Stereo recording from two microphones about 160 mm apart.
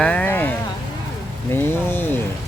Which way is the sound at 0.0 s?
10° left (ahead or behind).